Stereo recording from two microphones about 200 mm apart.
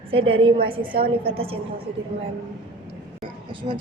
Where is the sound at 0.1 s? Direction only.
25° right (ahead or behind).